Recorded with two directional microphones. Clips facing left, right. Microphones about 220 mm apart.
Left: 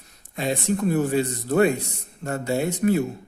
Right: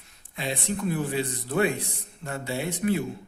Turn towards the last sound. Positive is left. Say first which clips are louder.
# left 5 dB
turn(degrees=45)  # may be behind; listen again after turning